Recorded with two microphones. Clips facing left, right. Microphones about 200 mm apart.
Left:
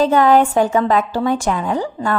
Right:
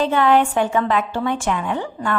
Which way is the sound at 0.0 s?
40° left (ahead or behind).